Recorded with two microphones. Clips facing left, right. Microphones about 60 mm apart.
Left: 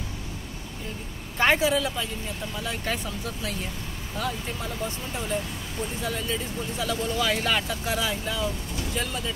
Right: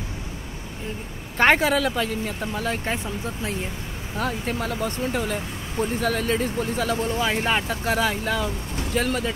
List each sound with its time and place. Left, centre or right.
1.4 s speech: right
2.8 s speech: right
4.2 s speech: right